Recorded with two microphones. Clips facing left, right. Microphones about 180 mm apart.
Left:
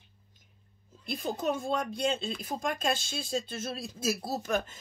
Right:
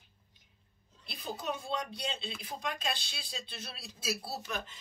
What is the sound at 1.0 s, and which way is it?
Speech, 45° left (ahead or behind).